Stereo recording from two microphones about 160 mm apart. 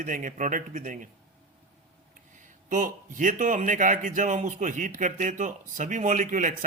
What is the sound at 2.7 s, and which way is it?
A man's voice, 55° right (ahead or behind).